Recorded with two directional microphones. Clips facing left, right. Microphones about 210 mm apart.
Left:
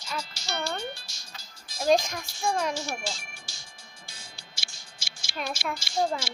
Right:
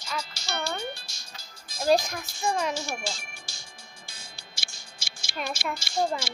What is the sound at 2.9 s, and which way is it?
Ringtone, 50° right (ahead or behind).